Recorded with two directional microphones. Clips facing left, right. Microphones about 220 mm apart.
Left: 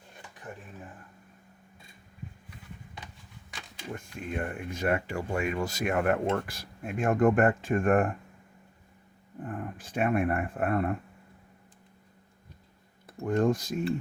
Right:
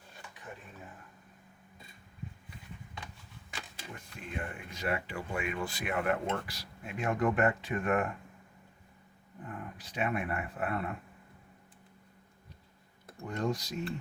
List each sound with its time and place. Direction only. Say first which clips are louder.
3.9 s speech: left 7 dB; 50° left (ahead or behind)
9.4 s speech: left 7 dB; 50° left (ahead or behind)
13.2 s speech: left 8 dB; 50° left (ahead or behind)